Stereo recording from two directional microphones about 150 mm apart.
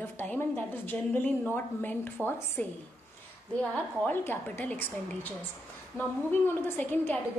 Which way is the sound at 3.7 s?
10° left (ahead or behind).